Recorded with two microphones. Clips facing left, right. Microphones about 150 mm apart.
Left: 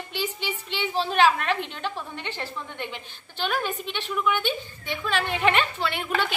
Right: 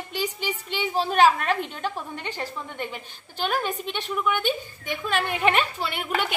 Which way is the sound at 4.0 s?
45° right (ahead or behind).